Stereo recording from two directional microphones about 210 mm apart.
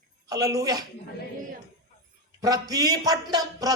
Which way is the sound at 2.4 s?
15° right (ahead or behind).